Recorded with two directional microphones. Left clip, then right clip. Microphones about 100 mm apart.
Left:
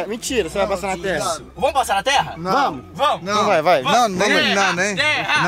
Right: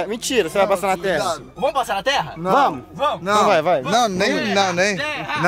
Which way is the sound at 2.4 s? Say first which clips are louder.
Right 2 dB; 30° right (ahead or behind).